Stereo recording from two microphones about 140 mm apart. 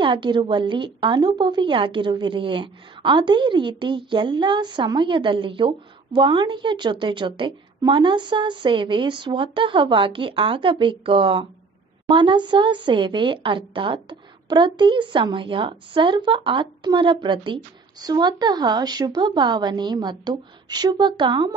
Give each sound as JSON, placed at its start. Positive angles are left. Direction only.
{"t": 0.0, "sound": "a woman's voice", "side_deg": -35}